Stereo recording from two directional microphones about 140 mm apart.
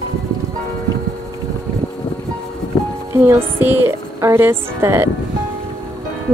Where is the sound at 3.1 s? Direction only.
15° right (ahead or behind).